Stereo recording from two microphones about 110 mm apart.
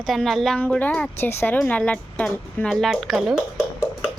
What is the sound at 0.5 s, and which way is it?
A woman's voice, 15° left (ahead or behind).